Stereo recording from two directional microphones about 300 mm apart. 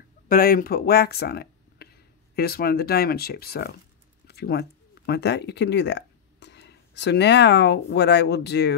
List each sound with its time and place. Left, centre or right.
0.3 s speech: left